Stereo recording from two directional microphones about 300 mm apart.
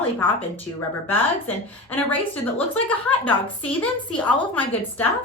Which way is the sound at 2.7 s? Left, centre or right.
Centre.